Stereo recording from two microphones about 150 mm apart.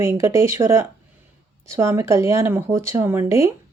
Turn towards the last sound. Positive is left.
turn(degrees=-20)  # may be behind; listen again after turning